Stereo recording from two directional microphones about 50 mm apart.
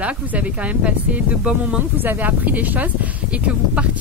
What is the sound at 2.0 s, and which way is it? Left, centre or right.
Speech, right.